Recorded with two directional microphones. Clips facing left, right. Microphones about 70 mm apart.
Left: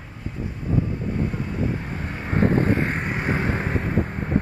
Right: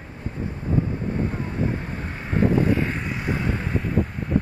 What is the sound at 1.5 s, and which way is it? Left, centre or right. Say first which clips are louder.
Vehicle: even; right.